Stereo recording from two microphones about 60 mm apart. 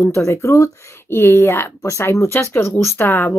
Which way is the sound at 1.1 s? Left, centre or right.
Left.